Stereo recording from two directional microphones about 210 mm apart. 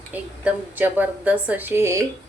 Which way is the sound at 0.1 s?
10° right (ahead or behind).